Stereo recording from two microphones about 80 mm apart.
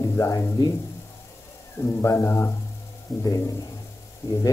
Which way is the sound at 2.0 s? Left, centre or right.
Left.